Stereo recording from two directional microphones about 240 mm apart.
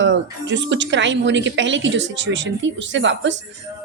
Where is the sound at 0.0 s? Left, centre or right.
Right.